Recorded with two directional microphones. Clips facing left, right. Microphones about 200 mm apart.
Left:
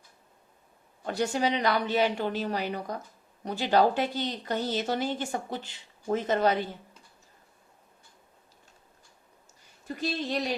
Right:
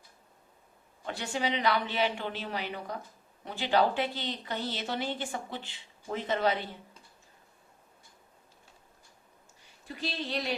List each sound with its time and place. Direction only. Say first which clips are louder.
1.0 s a woman's voice: left 5 dB; 40° left (ahead or behind)
9.8 s a woman's voice: left 5 dB; 45° left (ahead or behind)